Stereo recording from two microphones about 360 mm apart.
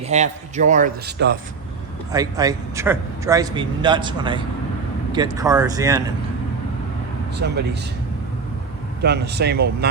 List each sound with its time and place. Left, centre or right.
0.0 s a man's voice: centre
2.1 s a man's voice: centre
7.3 s a man's voice: right
9.0 s a man's voice: right